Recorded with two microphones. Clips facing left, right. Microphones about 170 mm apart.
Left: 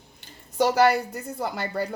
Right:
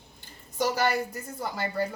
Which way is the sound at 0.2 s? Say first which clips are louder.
Left 6 dB; 70° left (ahead or behind).